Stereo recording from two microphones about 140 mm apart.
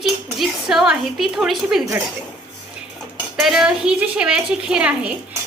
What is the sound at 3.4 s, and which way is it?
A woman's voice, centre (ahead or behind).